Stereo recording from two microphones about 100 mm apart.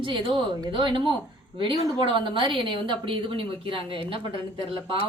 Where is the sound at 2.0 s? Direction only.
55° right (ahead or behind).